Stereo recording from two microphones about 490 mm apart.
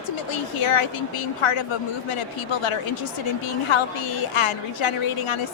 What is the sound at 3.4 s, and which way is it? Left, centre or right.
A woman's voice, left.